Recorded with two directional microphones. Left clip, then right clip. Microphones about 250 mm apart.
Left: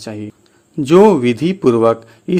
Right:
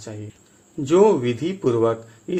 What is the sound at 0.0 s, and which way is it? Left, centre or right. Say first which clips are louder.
A man's voice: left 9 dB; left.